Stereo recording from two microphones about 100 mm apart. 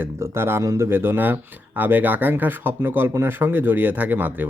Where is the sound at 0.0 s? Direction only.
25° right (ahead or behind).